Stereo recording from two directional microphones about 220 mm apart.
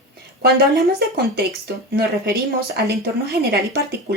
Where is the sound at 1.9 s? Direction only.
50° right (ahead or behind).